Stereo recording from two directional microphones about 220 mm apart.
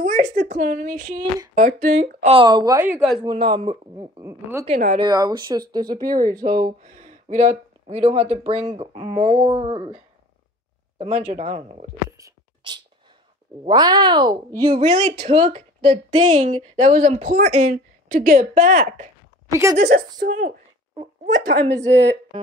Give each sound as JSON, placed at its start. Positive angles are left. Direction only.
{"t": 0.0, "sound": "speech", "side_deg": -35}
{"t": 2.2, "sound": "speech", "side_deg": -20}
{"t": 3.5, "sound": "speech", "side_deg": -15}
{"t": 6.4, "sound": "speech", "side_deg": -40}
{"t": 11.0, "sound": "speech", "side_deg": -30}
{"t": 12.2, "sound": "beatboxing", "side_deg": -15}
{"t": 13.7, "sound": "speech", "side_deg": -20}
{"t": 19.5, "sound": "speech", "side_deg": -15}
{"t": 19.8, "sound": "speech", "side_deg": -40}
{"t": 21.4, "sound": "a woman's voice", "side_deg": -50}